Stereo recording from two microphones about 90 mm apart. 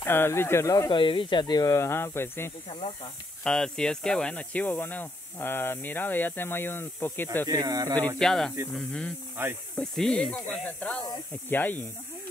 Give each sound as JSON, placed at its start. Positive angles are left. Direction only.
{"t": 0.0, "sound": "speech", "side_deg": 25}
{"t": 0.8, "sound": "speech", "side_deg": 65}
{"t": 1.7, "sound": "speech", "side_deg": 30}
{"t": 3.4, "sound": "speech", "side_deg": 10}
{"t": 7.4, "sound": "speech", "side_deg": -45}
{"t": 8.2, "sound": "speech", "side_deg": 5}
{"t": 9.4, "sound": "speech", "side_deg": -25}
{"t": 9.8, "sound": "speech", "side_deg": 10}